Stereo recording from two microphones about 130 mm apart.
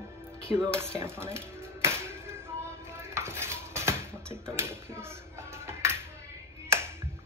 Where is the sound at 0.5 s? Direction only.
20° right (ahead or behind).